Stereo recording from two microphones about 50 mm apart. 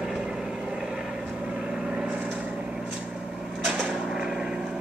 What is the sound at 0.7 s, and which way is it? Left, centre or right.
Vehicle, centre.